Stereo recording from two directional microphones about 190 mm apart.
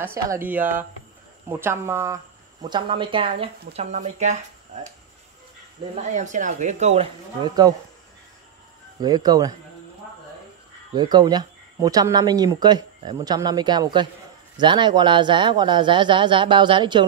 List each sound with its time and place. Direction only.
0.0 s speech: 10° right (ahead or behind)
2.6 s speech: 25° right (ahead or behind)
6.1 s speech: 40° right (ahead or behind); by 7.7 s 20° right (ahead or behind)
9.0 s speech: 20° right (ahead or behind)
11.0 s speech: 20° right (ahead or behind)